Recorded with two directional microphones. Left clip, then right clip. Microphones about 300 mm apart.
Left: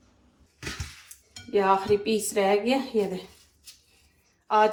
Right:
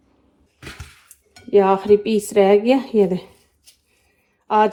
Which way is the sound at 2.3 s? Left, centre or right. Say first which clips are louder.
Right 10 dB; right.